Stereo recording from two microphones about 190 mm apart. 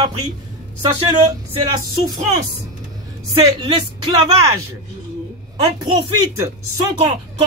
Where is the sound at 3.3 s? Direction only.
25° right (ahead or behind).